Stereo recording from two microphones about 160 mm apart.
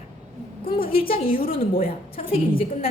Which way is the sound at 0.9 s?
35° left (ahead or behind).